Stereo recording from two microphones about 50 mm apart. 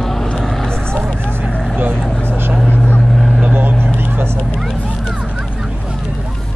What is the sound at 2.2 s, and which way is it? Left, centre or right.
Vehicle, right.